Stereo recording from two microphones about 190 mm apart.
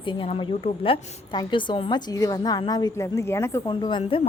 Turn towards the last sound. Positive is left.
turn(degrees=25)  # may be behind; listen again after turning